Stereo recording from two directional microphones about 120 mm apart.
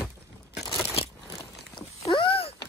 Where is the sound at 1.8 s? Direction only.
45° left (ahead or behind).